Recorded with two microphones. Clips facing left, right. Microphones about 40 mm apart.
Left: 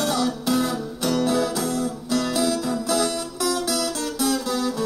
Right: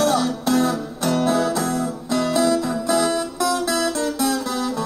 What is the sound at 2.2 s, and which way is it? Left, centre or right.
Music, centre.